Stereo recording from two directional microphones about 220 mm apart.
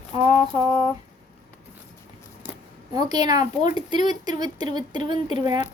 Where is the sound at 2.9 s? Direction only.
20° right (ahead or behind).